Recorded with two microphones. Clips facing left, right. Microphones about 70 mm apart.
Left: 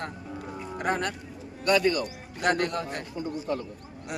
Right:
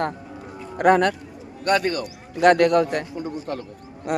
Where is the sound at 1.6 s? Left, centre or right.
Right.